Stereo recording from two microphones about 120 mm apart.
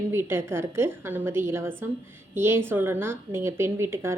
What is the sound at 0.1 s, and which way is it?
A woman's voice, 20° right (ahead or behind).